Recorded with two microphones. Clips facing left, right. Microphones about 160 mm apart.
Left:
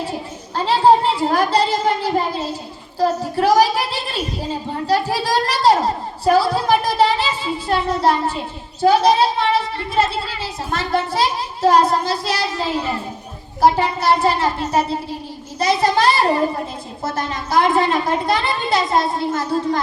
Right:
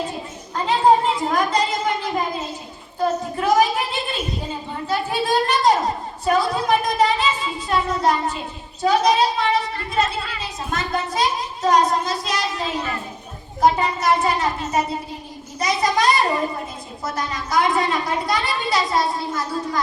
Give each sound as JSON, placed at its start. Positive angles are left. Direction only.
{"t": 0.5, "sound": "a child's voice", "side_deg": 30}